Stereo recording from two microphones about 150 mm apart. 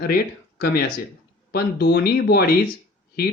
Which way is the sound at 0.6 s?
90° left.